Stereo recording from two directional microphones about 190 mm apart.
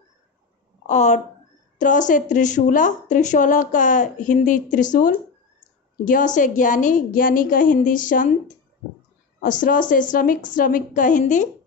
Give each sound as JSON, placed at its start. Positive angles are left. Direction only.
{"t": 0.8, "sound": "speech", "side_deg": 40}
{"t": 9.4, "sound": "speech", "side_deg": 45}